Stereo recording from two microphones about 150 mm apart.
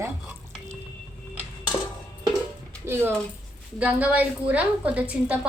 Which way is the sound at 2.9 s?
15° right (ahead or behind).